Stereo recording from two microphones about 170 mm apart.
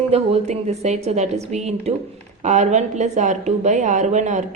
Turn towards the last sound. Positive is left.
turn(degrees=-45)  # may be behind; listen again after turning